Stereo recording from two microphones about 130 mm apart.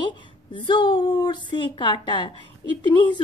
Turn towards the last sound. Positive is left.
turn(degrees=35)  # may be behind; listen again after turning